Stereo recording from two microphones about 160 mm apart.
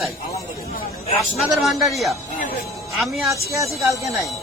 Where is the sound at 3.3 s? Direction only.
20° right (ahead or behind).